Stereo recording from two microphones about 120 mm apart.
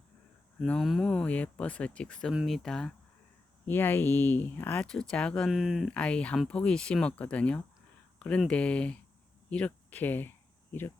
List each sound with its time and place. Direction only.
0.6 s speech: 5° left (ahead or behind)
3.7 s speech: 15° left (ahead or behind)
5.5 s speech: centre (ahead or behind)
5.9 s speech: 10° left (ahead or behind)